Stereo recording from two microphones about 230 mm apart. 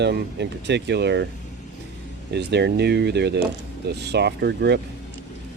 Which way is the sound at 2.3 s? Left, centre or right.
Right.